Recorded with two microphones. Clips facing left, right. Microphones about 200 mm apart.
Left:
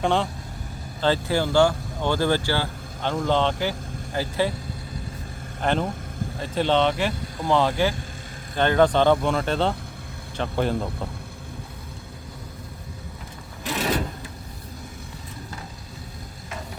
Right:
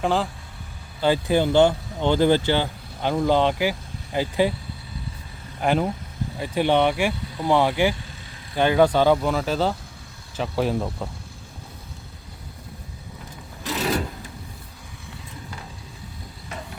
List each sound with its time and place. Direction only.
0.0 s speech: centre (ahead or behind)
1.0 s speech: 15° right (ahead or behind)
5.6 s speech: 10° right (ahead or behind)